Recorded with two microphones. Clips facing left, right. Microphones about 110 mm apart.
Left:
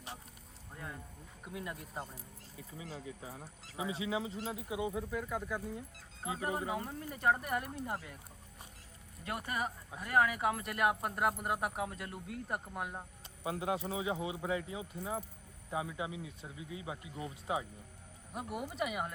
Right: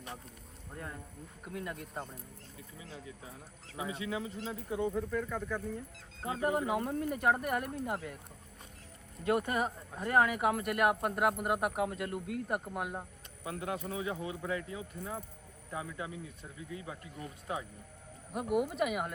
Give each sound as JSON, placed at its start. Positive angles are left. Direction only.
{"t": 1.5, "sound": "speech", "side_deg": 5}
{"t": 2.7, "sound": "speech", "side_deg": 35}
{"t": 3.8, "sound": "a man's voice", "side_deg": 20}
{"t": 4.4, "sound": "speech", "side_deg": 10}
{"t": 6.8, "sound": "speech", "side_deg": 0}
{"t": 9.5, "sound": "speech", "side_deg": -20}
{"t": 10.4, "sound": "speech", "side_deg": -5}
{"t": 13.4, "sound": "a man's voice", "side_deg": 20}
{"t": 18.3, "sound": "speech", "side_deg": 0}